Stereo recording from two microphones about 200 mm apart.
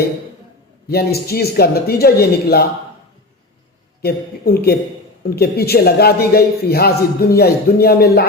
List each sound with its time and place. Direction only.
0.9 s a man's voice: 50° left (ahead or behind)
4.0 s a man's voice: 50° left (ahead or behind)